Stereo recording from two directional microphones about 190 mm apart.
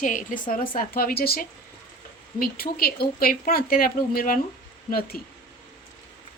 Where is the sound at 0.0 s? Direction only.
45° left (ahead or behind).